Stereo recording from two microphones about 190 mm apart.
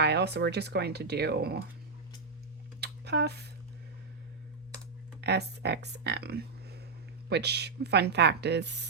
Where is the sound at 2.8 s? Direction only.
60° right (ahead or behind).